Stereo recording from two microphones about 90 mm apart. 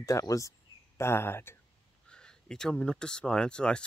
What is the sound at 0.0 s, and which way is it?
Speech, 35° left (ahead or behind).